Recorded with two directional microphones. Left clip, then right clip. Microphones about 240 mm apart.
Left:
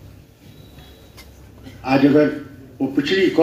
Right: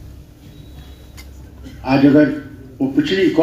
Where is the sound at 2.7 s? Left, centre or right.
Left.